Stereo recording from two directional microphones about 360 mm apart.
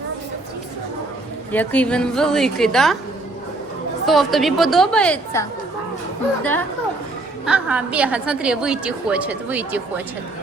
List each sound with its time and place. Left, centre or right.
1.5 s a woman's voice: centre
4.0 s a woman's voice: centre